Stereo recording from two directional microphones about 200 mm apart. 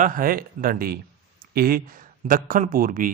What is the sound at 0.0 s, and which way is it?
Speech, 45° right (ahead or behind).